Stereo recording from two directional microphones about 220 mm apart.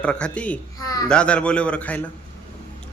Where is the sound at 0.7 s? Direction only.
15° left (ahead or behind).